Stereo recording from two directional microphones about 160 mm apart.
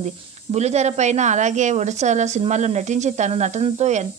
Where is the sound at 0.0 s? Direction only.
45° right (ahead or behind).